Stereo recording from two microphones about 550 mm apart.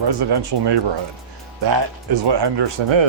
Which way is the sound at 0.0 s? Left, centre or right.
Right.